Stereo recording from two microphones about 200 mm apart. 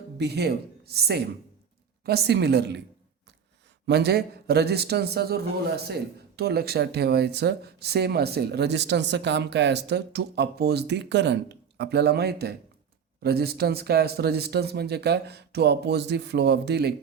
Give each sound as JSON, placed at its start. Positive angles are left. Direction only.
{"t": 0.2, "sound": "a man's voice", "side_deg": -55}
{"t": 3.8, "sound": "a man's voice", "side_deg": -55}